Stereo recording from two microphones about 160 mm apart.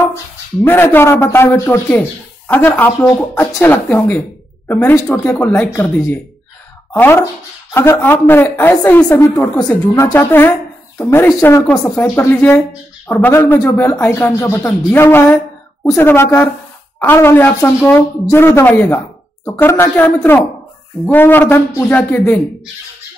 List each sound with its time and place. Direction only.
0.7 s a man's voice: 15° left (ahead or behind)